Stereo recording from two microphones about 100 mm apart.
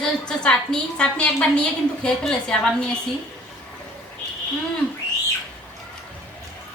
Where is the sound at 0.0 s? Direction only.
5° left (ahead or behind).